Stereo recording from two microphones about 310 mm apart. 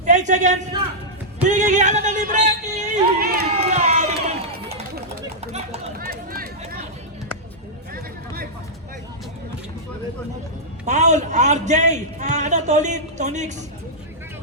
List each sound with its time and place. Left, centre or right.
0.0 s a sound: right
5.5 s run: right
10.8 s a man's voice: right